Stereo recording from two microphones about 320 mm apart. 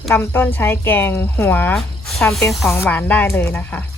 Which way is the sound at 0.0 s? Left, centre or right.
Centre.